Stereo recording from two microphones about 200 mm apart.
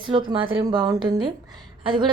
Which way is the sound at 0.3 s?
25° right (ahead or behind).